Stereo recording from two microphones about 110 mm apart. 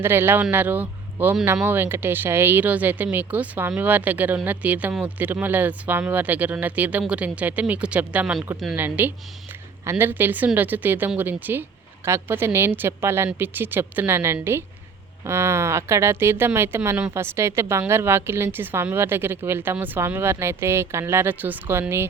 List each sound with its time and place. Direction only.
0.0 s a woman's voice: 20° right (ahead or behind)